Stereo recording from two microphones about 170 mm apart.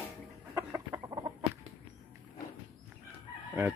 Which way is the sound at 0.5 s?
20° right (ahead or behind).